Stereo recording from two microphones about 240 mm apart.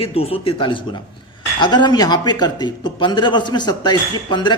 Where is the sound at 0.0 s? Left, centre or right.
Left.